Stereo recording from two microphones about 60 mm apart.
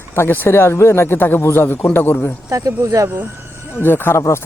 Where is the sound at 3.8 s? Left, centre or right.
Left.